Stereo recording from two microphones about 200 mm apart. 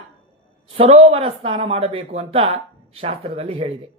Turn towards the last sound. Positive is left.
turn(degrees=-30)  # may be behind; listen again after turning